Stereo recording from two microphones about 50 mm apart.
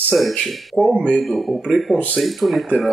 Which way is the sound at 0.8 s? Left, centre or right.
Left.